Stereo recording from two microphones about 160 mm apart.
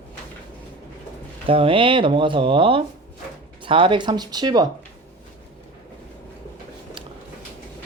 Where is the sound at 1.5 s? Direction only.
35° right (ahead or behind).